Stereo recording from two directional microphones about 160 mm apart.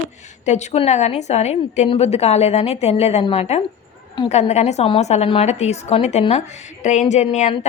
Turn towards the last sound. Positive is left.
turn(degrees=45)  # may be behind; listen again after turning